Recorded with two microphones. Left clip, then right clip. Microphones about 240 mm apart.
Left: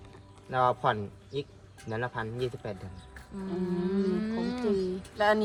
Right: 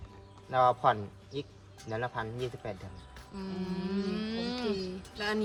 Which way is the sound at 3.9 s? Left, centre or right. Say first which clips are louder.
Left 2 dB; centre.